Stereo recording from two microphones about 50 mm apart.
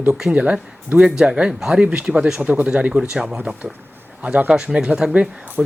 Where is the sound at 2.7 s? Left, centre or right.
Right.